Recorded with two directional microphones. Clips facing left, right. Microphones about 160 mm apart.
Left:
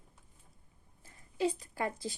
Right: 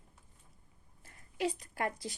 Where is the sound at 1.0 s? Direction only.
30° left (ahead or behind).